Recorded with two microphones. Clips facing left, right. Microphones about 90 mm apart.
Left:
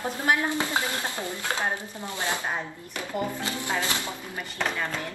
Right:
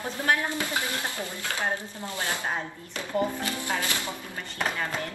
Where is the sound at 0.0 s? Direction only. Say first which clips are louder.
Left 1 dB; 20° left (ahead or behind).